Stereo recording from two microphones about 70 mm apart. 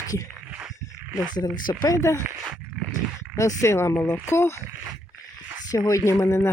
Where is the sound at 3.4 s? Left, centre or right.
Left.